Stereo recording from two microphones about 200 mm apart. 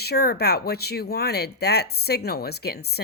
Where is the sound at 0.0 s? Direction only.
50° left (ahead or behind).